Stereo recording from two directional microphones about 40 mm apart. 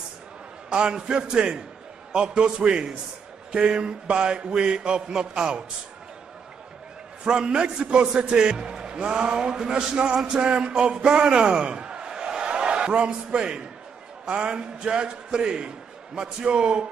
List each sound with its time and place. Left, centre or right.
0.7 s a man's voice: right
7.3 s a man's voice: right